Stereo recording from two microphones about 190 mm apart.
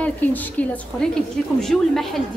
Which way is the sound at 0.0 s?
10° left (ahead or behind).